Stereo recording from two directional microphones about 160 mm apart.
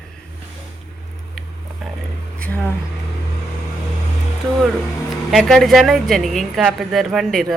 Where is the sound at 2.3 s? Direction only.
10° left (ahead or behind).